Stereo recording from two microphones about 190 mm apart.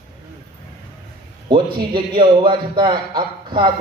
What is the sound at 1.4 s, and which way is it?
A man's voice, 25° right (ahead or behind).